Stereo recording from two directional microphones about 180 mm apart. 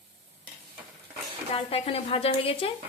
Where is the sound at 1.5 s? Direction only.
30° left (ahead or behind).